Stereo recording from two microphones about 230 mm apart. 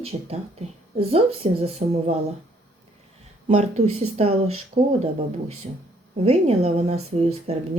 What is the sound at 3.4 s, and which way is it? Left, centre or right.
Speech, right.